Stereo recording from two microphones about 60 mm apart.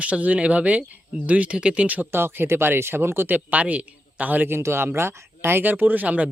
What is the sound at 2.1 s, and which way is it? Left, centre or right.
Speech, right.